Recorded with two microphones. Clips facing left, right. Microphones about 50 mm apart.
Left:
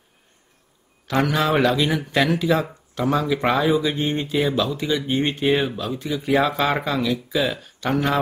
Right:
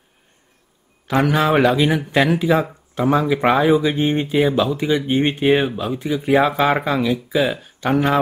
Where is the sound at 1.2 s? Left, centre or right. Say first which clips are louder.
Right 4 dB; centre.